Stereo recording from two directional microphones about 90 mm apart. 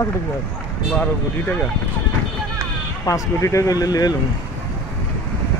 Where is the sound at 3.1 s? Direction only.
35° left (ahead or behind).